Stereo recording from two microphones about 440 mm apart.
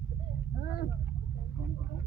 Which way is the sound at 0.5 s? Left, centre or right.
Left.